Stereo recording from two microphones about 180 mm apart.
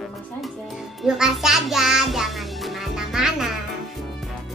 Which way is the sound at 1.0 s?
5° right (ahead or behind).